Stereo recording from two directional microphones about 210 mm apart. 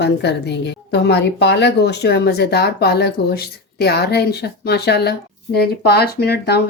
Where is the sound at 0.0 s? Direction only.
55° left (ahead or behind).